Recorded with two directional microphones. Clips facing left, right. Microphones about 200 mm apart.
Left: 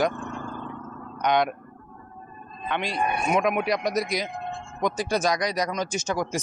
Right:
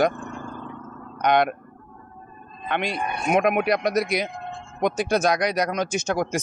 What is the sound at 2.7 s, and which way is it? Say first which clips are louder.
Speech: even; 55° right (ahead or behind).